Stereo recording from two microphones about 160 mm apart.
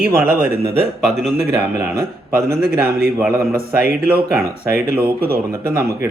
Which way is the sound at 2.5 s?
75° right (ahead or behind).